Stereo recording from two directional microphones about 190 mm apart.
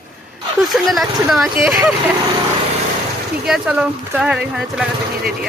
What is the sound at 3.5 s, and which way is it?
Speech, 5° right (ahead or behind).